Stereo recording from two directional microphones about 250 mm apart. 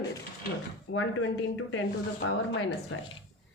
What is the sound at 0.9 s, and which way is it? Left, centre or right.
A woman's voice, left.